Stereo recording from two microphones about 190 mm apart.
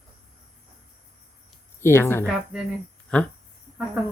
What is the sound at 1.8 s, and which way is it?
Speech, 15° left (ahead or behind).